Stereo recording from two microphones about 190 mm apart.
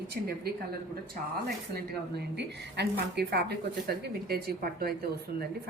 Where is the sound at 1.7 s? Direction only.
60° right (ahead or behind).